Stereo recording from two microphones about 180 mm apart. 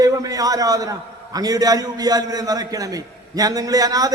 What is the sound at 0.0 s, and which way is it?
A man's voice, 20° right (ahead or behind).